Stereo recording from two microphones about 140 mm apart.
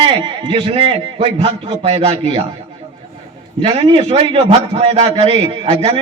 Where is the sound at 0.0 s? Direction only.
40° right (ahead or behind).